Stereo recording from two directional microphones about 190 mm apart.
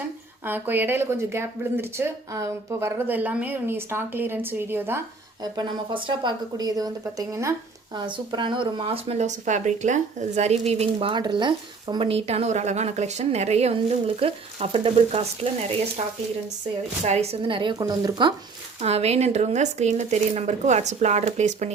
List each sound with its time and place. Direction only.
0.4 s speech: 10° right (ahead or behind)
5.4 s speech: 25° right (ahead or behind)
17.0 s speech: 35° right (ahead or behind)
18.8 s speech: 35° right (ahead or behind)